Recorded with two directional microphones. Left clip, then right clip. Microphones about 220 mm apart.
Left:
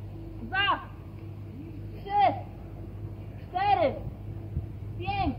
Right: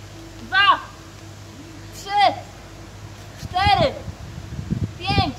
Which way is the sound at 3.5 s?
5° right (ahead or behind).